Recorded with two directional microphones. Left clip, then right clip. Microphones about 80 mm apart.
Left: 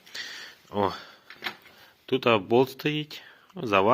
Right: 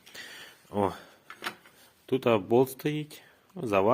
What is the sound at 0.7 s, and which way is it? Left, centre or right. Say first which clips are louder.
Speech: left 2 dB; right.